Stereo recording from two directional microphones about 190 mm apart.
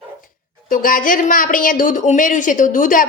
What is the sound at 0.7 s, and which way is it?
Speech, 45° left (ahead or behind).